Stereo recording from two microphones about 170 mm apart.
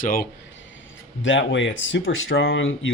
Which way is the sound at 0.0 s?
60° left (ahead or behind).